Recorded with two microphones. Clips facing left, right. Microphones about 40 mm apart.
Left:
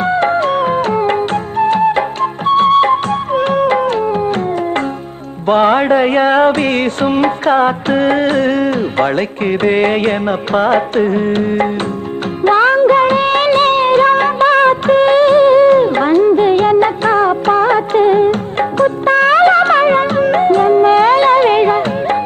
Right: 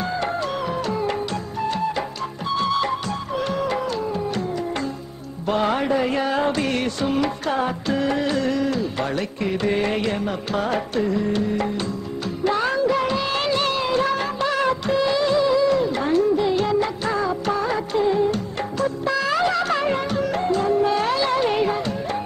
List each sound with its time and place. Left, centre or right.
0.0 s music: left
5.5 s music: left
12.4 s music of bollywood: left